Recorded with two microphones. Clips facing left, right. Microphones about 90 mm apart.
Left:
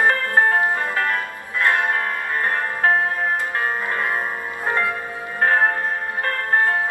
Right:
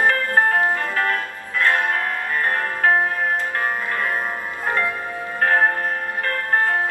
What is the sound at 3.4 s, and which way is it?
Music, 20° left (ahead or behind).